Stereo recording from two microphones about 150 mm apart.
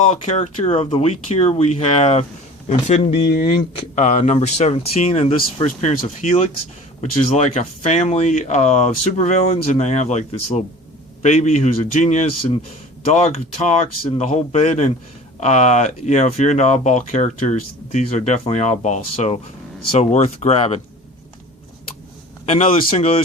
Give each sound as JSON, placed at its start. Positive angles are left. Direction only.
{"t": 0.3, "sound": "speech", "side_deg": 45}
{"t": 3.0, "sound": "speech", "side_deg": 35}
{"t": 22.4, "sound": "speech", "side_deg": 45}